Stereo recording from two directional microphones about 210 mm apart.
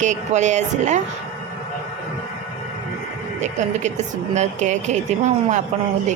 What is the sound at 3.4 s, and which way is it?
A woman's voice, 35° right (ahead or behind).